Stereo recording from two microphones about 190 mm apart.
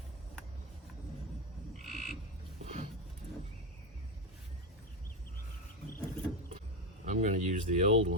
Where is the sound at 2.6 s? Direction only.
35° right (ahead or behind).